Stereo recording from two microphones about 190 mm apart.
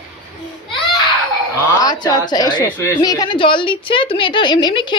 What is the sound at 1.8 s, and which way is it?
A woman's voice, 20° left (ahead or behind).